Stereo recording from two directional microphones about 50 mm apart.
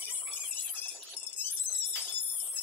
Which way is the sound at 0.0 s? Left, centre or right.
Left.